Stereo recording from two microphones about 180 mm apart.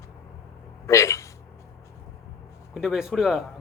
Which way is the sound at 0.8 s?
15° left (ahead or behind).